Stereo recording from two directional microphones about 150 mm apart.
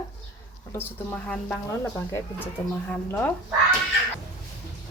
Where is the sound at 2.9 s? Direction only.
10° left (ahead or behind).